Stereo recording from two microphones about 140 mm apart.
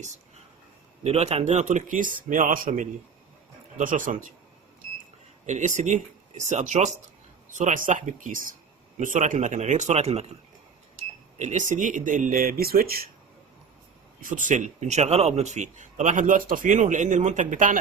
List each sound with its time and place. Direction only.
1.0 s a man's voice: 50° right (ahead or behind); by 4.3 s 70° right (ahead or behind)
5.5 s a man's voice: 60° right (ahead or behind)
7.5 s a man's voice: 65° right (ahead or behind); by 10.3 s 50° right (ahead or behind)
11.3 s speech: 55° right (ahead or behind); by 13.1 s 90° right
14.2 s a man's voice: 70° right (ahead or behind)